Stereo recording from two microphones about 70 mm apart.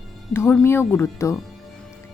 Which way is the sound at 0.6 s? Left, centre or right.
Left.